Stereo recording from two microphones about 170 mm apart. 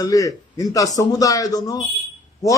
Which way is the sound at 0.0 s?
20° left (ahead or behind).